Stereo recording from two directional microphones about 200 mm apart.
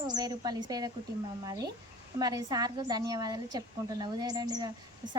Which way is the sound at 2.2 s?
20° right (ahead or behind).